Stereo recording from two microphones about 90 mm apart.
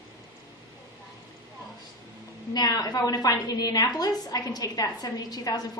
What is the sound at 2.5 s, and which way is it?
A woman's voice, 45° left (ahead or behind).